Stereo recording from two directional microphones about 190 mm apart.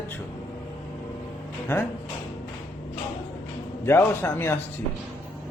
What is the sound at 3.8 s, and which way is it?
Speech, 10° left (ahead or behind).